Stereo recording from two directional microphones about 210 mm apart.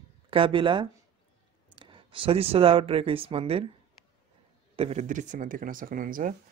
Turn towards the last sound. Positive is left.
turn(degrees=-40)  # may be behind; listen again after turning